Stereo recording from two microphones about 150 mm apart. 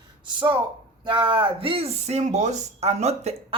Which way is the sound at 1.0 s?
35° right (ahead or behind).